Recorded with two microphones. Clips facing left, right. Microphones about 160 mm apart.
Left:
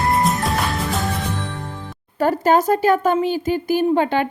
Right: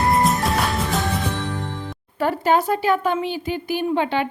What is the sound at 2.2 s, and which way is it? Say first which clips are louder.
A woman's voice: left 3 dB; 40° left (ahead or behind).